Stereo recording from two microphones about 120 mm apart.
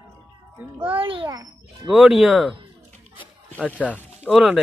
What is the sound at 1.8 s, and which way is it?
Speech, 5° right (ahead or behind).